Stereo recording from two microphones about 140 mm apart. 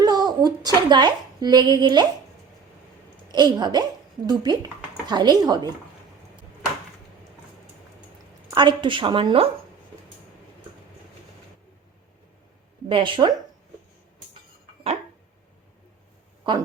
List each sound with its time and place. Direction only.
0.0 s a woman's voice: 30° right (ahead or behind)
3.3 s a woman's voice: 30° right (ahead or behind)
8.4 s a woman's voice: 35° right (ahead or behind)
12.9 s a woman's voice: 35° right (ahead or behind)
16.4 s a woman's voice: 35° right (ahead or behind)